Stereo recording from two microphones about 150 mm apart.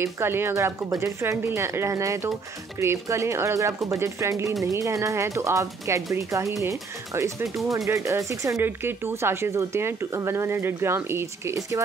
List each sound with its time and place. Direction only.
0.0 s speech: 15° right (ahead or behind)